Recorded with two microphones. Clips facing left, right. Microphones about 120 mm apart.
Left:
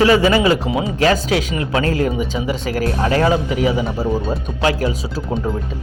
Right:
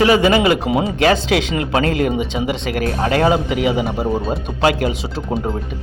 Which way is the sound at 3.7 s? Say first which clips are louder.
Right 1 dB; 25° right (ahead or behind).